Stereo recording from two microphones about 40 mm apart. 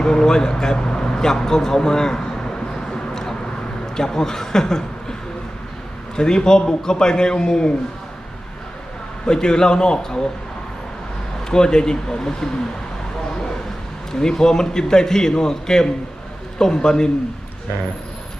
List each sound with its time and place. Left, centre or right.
0.0 s speech: centre
2.9 s a sound: centre
3.9 s speech: centre
6.1 s a man's voice: centre
9.2 s a man's voice: centre
11.4 s speech: centre
14.1 s speech: centre